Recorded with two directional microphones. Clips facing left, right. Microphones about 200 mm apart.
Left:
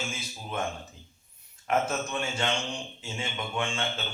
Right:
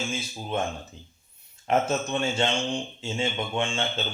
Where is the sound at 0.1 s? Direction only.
25° right (ahead or behind).